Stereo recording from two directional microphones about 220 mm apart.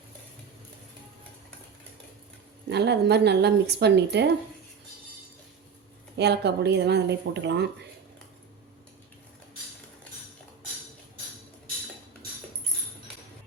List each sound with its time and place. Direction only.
2.6 s a woman's voice: 50° right (ahead or behind)
6.1 s a woman's voice: 50° right (ahead or behind)